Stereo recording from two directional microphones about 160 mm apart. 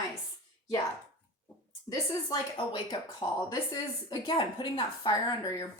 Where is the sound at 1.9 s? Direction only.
30° left (ahead or behind).